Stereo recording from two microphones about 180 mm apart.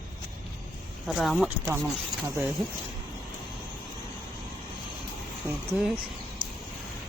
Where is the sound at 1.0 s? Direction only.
Centre (ahead or behind).